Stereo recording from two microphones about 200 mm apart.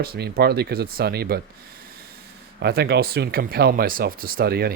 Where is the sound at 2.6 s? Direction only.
55° right (ahead or behind).